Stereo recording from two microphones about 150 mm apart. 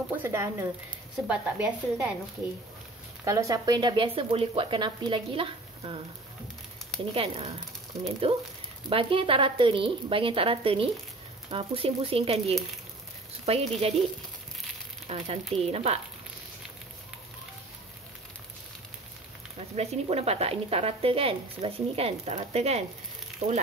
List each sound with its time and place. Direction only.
0.1 s speech: 15° right (ahead or behind)
1.2 s speech: 5° right (ahead or behind)
3.3 s speech: 20° right (ahead or behind)
7.2 s speech: 40° right (ahead or behind)
15.0 s speech: 45° right (ahead or behind)
19.7 s speech: 45° right (ahead or behind)